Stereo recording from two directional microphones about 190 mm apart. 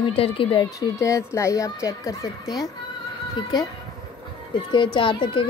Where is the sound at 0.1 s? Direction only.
30° left (ahead or behind).